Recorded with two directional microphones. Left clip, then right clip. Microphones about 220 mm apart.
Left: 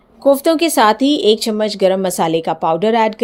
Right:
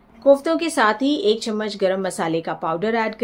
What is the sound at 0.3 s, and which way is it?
A woman's voice, 35° left (ahead or behind).